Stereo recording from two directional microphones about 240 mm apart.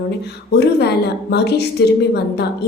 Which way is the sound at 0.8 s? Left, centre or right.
Left.